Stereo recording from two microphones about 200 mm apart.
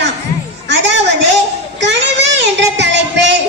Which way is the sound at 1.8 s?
60° right (ahead or behind).